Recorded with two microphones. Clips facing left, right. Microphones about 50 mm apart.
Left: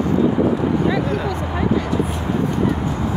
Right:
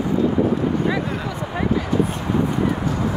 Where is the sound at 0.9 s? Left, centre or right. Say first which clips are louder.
Left 4 dB; centre.